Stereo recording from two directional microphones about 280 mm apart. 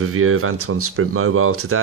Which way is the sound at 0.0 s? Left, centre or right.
Right.